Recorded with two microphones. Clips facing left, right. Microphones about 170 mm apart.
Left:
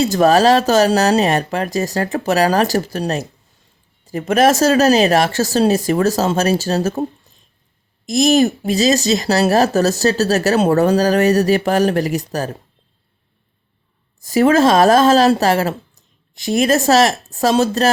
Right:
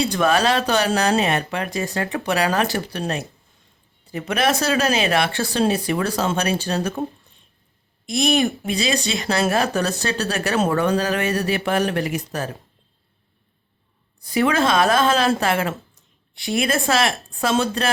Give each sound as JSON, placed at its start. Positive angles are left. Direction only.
{"t": 0.0, "sound": "speech", "side_deg": 40}
{"t": 8.0, "sound": "speech", "side_deg": 40}
{"t": 14.3, "sound": "speech", "side_deg": 40}